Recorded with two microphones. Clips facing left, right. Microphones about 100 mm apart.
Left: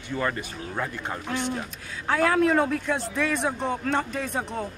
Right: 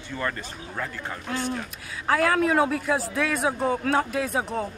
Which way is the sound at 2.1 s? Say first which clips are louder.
Even; centre (ahead or behind).